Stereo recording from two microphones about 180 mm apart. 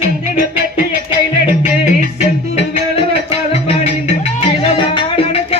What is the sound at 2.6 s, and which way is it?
Music, 35° left (ahead or behind).